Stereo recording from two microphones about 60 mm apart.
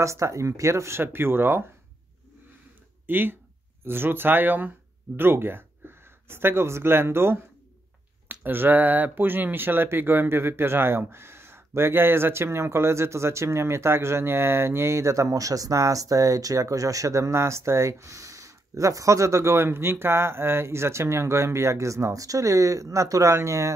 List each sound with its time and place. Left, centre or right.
0.0 s speech: right
3.1 s speech: right